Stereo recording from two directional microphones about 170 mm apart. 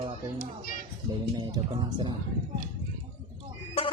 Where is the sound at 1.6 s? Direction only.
25° right (ahead or behind).